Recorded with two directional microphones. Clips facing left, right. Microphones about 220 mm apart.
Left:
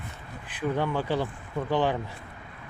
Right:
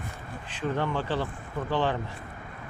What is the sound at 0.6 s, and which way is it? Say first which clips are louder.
Speech: left 2 dB; 10° left (ahead or behind).